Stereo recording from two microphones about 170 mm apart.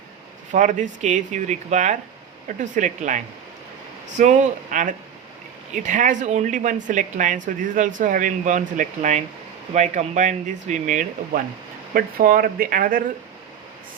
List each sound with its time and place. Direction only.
0.5 s speech: 50° right (ahead or behind)